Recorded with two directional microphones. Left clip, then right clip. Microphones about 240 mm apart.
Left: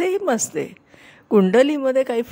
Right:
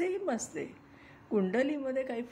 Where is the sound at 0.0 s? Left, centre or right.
Left.